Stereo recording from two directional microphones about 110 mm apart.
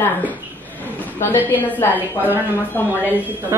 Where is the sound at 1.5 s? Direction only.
15° left (ahead or behind).